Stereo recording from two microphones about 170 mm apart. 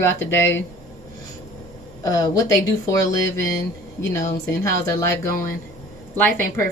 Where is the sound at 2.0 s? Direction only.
20° left (ahead or behind).